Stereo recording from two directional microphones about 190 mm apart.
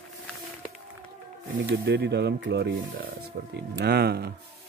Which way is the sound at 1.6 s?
60° right (ahead or behind).